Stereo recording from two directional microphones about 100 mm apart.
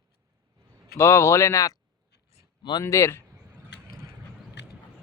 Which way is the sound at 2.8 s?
30° left (ahead or behind).